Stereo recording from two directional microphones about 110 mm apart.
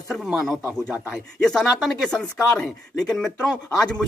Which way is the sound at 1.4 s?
Centre (ahead or behind).